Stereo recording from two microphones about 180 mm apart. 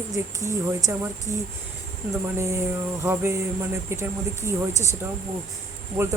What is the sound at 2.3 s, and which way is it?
Speech, 15° right (ahead or behind).